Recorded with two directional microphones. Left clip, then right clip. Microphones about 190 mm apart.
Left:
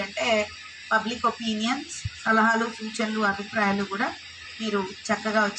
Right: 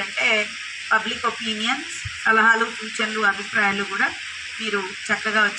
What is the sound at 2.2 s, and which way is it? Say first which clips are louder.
Speech: right 5 dB; 50° left (ahead or behind).